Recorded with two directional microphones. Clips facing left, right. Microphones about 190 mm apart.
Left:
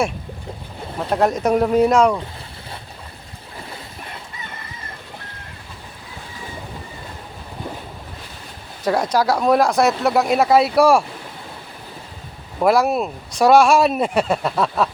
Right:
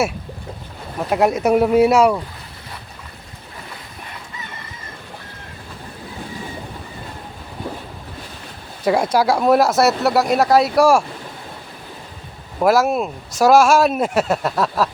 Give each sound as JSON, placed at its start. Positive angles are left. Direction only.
{"t": 1.1, "sound": "speech", "side_deg": -10}
{"t": 8.8, "sound": "speech", "side_deg": -10}
{"t": 12.5, "sound": "speech", "side_deg": 0}